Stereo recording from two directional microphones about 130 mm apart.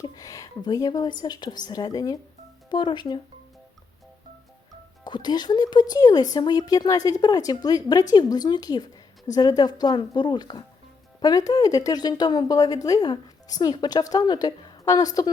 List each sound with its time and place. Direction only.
0.2 s speech: 25° left (ahead or behind)
5.0 s a woman's voice: 35° left (ahead or behind)